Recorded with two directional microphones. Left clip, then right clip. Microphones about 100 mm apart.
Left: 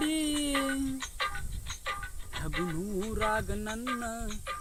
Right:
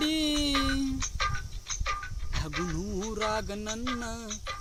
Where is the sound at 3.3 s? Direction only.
35° right (ahead or behind).